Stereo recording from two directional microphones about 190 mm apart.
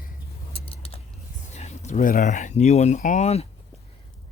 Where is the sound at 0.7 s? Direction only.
30° left (ahead or behind).